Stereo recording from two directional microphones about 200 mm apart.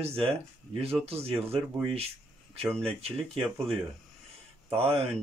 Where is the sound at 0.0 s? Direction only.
30° right (ahead or behind).